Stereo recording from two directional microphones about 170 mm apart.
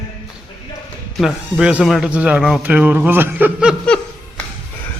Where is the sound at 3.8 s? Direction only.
5° left (ahead or behind).